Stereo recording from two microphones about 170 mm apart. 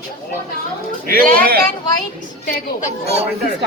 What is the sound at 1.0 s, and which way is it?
Speech, 60° right (ahead or behind).